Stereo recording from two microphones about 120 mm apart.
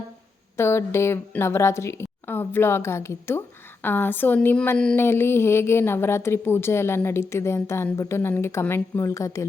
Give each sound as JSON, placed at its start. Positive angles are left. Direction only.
{"t": 0.5, "sound": "a woman's voice", "side_deg": 20}